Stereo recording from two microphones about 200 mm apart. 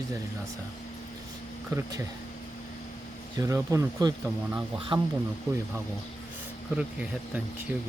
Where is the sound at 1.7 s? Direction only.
15° right (ahead or behind).